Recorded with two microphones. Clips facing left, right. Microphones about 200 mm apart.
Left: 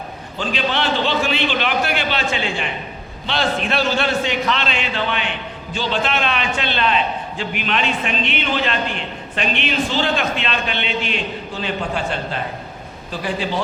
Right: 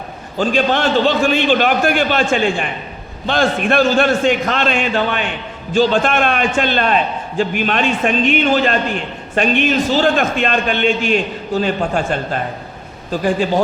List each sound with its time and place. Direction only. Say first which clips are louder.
0.3 s a man's voice: right 6 dB; 45° right (ahead or behind)